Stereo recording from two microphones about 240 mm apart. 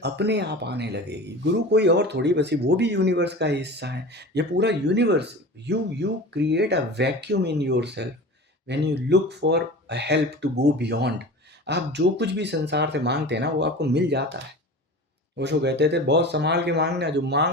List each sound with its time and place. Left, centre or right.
0.0 s speech: right
15.4 s speech: right